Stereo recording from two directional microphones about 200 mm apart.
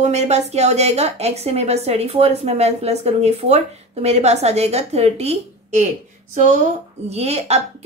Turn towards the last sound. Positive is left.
turn(degrees=-30)  # may be behind; listen again after turning